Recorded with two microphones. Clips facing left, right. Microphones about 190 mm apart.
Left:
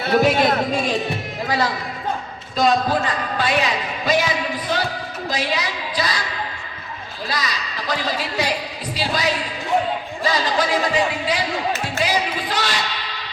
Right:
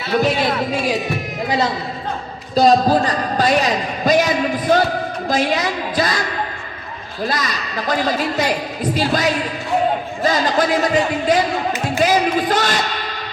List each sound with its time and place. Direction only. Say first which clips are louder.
0.3 s speech: left 2 dB; 50° left (ahead or behind)
1.5 s a man's voice: right 2 dB; 20° right (ahead or behind)
2.6 s a man's voice: right 5 dB; 35° right (ahead or behind)